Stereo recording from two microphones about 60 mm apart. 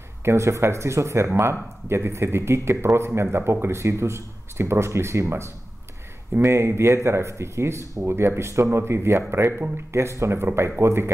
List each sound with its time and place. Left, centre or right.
0.2 s speech: right